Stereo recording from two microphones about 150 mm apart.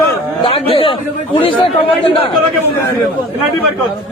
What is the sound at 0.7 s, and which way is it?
Speech, 35° left (ahead or behind).